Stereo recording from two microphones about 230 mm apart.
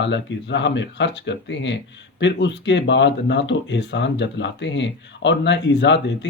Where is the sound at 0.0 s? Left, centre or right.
Left.